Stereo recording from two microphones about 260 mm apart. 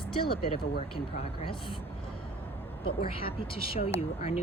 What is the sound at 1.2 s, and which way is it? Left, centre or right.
Speech, left.